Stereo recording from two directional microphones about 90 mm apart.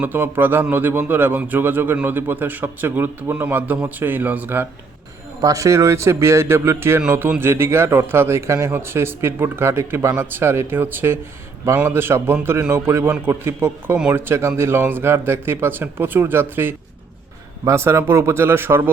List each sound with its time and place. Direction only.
0.0 s a man's voice: 20° right (ahead or behind)
5.4 s a man's voice: 40° right (ahead or behind)